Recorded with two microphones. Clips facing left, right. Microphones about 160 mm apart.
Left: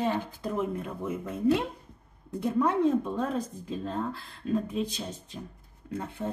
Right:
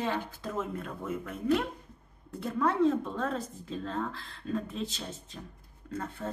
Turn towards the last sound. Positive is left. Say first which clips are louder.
# left 3 dB
turn(degrees=15)  # may be behind; listen again after turning